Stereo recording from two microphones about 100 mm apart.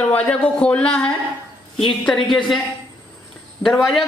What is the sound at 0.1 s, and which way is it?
A man's voice, 15° left (ahead or behind).